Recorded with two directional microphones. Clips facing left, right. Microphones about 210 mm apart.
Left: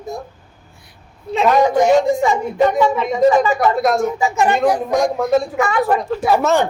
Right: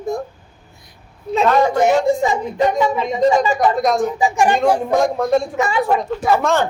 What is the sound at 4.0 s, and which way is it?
Speech, 15° right (ahead or behind).